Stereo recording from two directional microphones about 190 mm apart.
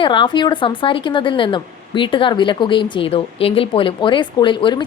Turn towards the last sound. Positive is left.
turn(degrees=25)  # may be behind; listen again after turning